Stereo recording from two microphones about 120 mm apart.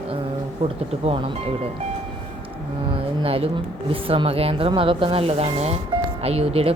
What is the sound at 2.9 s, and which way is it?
Speech, 50° right (ahead or behind).